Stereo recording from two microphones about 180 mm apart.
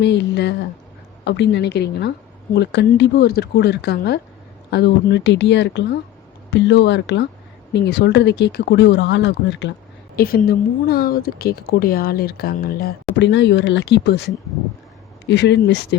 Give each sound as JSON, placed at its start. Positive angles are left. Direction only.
{"t": 0.0, "sound": "a woman's voice", "side_deg": 75}
{"t": 10.2, "sound": "a woman's voice", "side_deg": 55}